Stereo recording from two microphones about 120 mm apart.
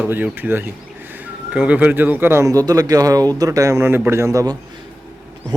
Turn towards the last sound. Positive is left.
turn(degrees=-25)  # may be behind; listen again after turning